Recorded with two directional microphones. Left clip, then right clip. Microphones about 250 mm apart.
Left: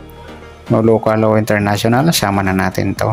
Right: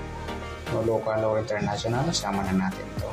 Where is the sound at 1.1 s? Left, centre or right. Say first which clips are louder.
Left 12 dB; left.